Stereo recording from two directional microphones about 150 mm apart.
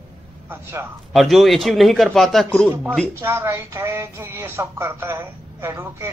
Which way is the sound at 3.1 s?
15° right (ahead or behind).